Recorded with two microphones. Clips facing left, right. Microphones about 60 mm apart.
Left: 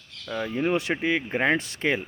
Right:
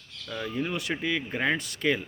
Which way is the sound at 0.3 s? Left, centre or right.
Left.